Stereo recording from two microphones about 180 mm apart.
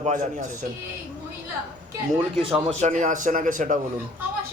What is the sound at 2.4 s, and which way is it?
A man's voice, 30° right (ahead or behind).